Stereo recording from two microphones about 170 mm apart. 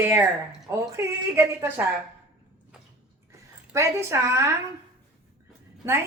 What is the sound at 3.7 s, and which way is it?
Speech, 15° right (ahead or behind).